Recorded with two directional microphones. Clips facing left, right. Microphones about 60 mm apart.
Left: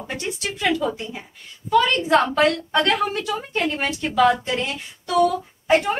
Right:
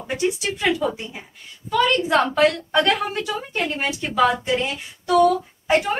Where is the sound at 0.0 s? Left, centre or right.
Centre.